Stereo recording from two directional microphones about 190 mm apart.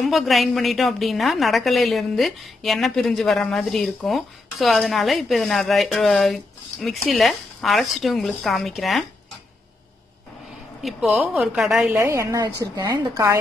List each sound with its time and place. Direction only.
0.0 s a woman's voice: centre (ahead or behind)
10.8 s a woman's voice: centre (ahead or behind)
11.9 s a woman's voice: 15° right (ahead or behind)